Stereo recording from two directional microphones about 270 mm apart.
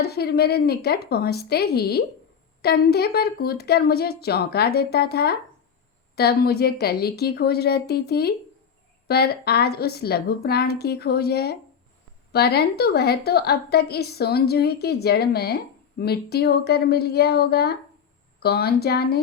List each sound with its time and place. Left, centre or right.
0.0 s a woman's voice: left